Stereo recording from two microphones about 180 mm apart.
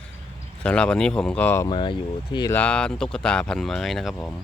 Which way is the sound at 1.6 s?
25° left (ahead or behind).